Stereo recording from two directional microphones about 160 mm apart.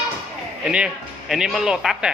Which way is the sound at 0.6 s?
5° right (ahead or behind).